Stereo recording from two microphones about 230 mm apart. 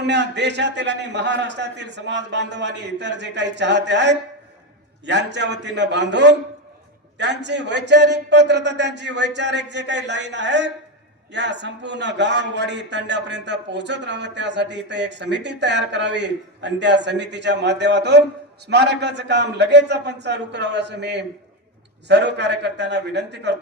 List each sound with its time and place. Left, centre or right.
0.0 s a man's voice: right